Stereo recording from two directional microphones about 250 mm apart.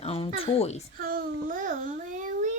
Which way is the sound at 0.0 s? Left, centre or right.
Left.